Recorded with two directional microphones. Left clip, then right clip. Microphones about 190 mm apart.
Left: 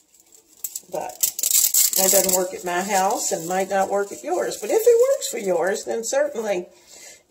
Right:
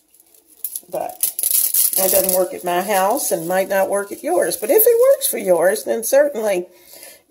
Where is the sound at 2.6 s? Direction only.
55° right (ahead or behind).